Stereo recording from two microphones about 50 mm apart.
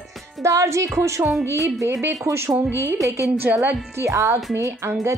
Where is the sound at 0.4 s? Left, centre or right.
Right.